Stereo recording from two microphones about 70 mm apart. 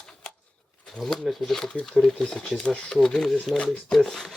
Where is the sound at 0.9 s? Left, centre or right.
Centre.